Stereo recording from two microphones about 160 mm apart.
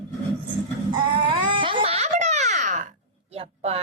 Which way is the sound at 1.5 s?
30° right (ahead or behind).